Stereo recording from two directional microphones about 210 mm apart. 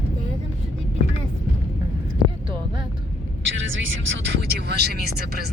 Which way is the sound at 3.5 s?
65° right (ahead or behind).